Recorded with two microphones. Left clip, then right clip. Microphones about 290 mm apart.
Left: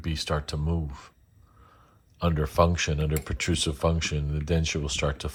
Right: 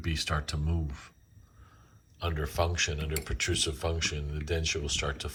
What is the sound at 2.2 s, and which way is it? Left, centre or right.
Speech, left.